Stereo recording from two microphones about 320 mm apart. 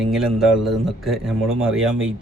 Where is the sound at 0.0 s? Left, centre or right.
Centre.